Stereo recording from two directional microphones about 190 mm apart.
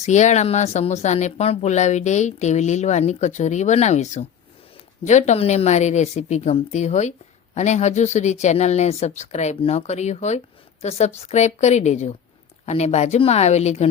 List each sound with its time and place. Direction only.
0.0 s speech: 40° left (ahead or behind)